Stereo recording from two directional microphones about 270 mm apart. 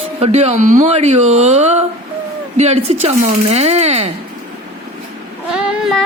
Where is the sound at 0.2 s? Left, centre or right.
Right.